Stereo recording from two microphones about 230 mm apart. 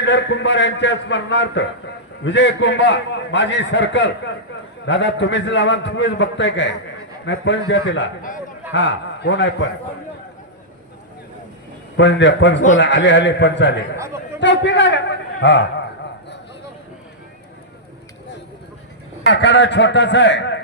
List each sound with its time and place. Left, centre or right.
0.0 s a man's voice: left
11.9 s a man's voice: left
13.9 s speech: centre
14.4 s a man's voice: left
19.3 s a man's voice: left